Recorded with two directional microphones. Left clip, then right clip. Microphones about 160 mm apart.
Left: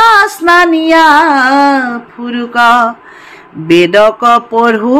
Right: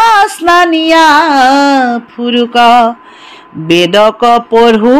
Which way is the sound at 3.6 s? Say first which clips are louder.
Even; 35° right (ahead or behind).